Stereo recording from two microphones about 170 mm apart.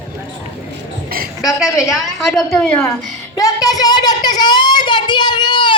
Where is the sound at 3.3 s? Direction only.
20° left (ahead or behind).